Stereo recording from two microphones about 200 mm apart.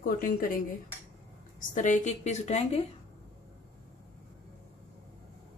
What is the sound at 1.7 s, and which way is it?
A woman's voice, 40° left (ahead or behind).